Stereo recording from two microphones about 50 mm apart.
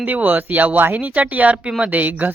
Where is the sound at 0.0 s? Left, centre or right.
Right.